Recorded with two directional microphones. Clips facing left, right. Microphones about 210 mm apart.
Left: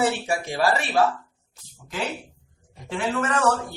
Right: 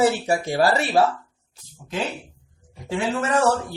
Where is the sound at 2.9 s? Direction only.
25° right (ahead or behind).